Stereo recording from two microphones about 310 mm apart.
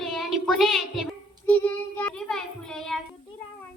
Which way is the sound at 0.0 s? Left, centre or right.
Centre.